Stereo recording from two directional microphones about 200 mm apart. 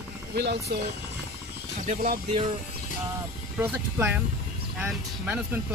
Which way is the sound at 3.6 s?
10° right (ahead or behind).